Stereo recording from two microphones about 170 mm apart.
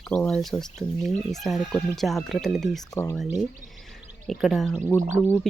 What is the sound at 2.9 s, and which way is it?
Speech, 15° left (ahead or behind).